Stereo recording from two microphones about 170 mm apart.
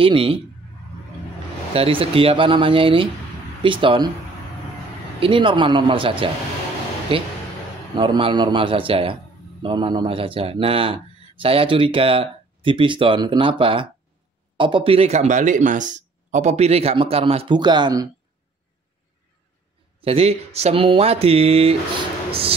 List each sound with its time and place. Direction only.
0.0 s a man's voice: 35° right (ahead or behind)
1.7 s a man's voice: 35° right (ahead or behind)
5.2 s a man's voice: 30° right (ahead or behind)
20.0 s a man's voice: 35° right (ahead or behind)